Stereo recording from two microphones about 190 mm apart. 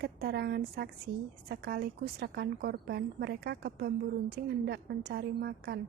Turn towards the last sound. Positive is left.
turn(degrees=-55)  # may be behind; listen again after turning